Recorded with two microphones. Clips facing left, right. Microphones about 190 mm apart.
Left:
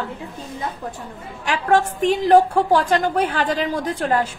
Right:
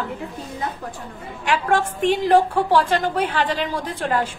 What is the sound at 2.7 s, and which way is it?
A woman's voice, 45° left (ahead or behind).